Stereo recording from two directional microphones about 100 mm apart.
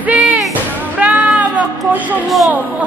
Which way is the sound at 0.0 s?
15° right (ahead or behind).